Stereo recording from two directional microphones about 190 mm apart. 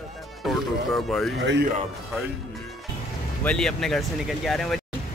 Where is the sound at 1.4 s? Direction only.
65° right (ahead or behind).